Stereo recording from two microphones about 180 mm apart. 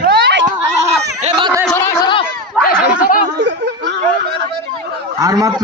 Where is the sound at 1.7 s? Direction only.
15° left (ahead or behind).